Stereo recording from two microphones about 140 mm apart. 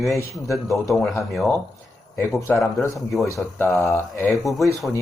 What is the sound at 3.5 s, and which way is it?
Speech, 20° left (ahead or behind).